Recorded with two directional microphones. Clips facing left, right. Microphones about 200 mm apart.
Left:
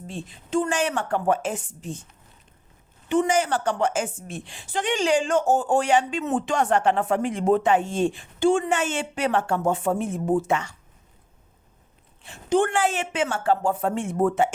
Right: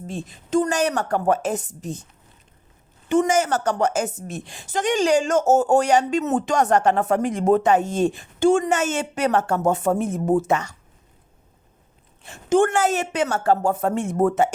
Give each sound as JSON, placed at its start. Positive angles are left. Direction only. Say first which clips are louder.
{"t": 0.1, "sound": "a woman's voice", "louder": "right 4 dB", "side_deg": -45}
{"t": 3.1, "sound": "a woman's voice", "louder": "right 2 dB", "side_deg": -45}
{"t": 12.2, "sound": "a woman's voice", "louder": "right 3 dB", "side_deg": -45}